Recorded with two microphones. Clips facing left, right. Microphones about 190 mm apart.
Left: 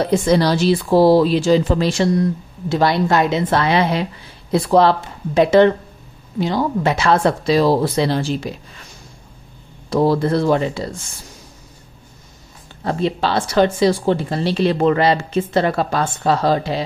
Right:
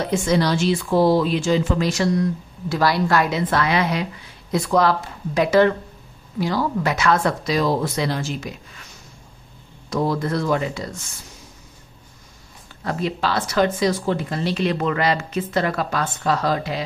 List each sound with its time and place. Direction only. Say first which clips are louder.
0.0 s speech: left 4 dB; 35° left (ahead or behind)
9.8 s speech: left 6 dB; 30° left (ahead or behind)
12.8 s speech: left 4 dB; 30° left (ahead or behind)